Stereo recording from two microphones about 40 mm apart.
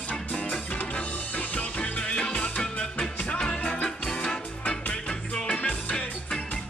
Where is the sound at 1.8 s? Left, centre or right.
Left.